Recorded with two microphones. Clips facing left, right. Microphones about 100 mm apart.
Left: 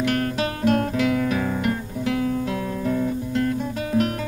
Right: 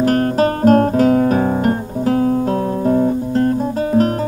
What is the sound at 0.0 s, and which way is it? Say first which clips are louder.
Guitar: right 9 dB; 40° right (ahead or behind).